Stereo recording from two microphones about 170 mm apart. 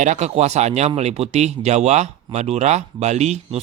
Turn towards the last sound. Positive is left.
turn(degrees=-40)  # may be behind; listen again after turning